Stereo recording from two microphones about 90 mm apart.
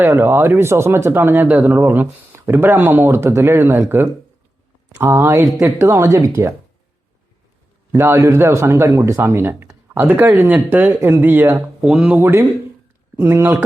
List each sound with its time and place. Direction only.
0.0 s speech: 30° right (ahead or behind)
7.9 s speech: 30° right (ahead or behind)
11.8 s speech: 10° right (ahead or behind)
12.1 s speech: 25° right (ahead or behind)